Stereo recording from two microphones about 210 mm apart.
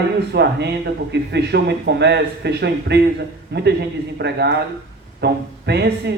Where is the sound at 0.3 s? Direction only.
50° right (ahead or behind).